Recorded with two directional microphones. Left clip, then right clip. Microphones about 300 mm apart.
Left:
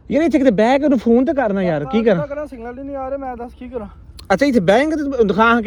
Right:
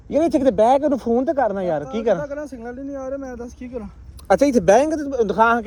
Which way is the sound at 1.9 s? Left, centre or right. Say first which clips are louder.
Left 4 dB; left.